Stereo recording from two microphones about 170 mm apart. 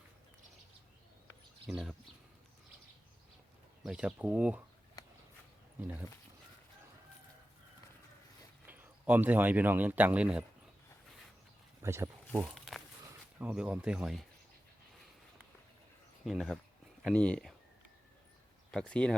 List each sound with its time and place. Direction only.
1.6 s speech: centre (ahead or behind)
3.8 s speech: 5° right (ahead or behind)
5.0 s a sound: 20° left (ahead or behind)
8.6 s speech: 10° right (ahead or behind)
11.8 s speech: 15° right (ahead or behind)
12.5 s a sound: centre (ahead or behind)
13.4 s speech: 10° right (ahead or behind)
16.2 s speech: centre (ahead or behind)
18.7 s speech: 5° left (ahead or behind)